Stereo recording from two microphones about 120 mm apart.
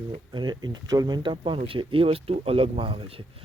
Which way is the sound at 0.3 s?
35° right (ahead or behind).